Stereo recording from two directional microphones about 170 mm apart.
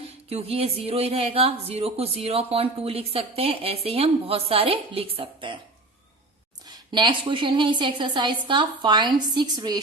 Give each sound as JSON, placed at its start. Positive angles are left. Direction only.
{"t": 0.3, "sound": "speech", "side_deg": -35}
{"t": 6.7, "sound": "a woman's voice", "side_deg": -25}